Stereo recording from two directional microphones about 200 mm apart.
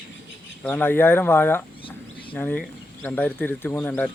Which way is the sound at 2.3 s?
10° left (ahead or behind).